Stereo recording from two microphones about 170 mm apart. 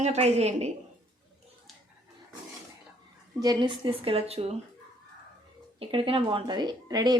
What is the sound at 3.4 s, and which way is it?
A woman's voice, 25° right (ahead or behind).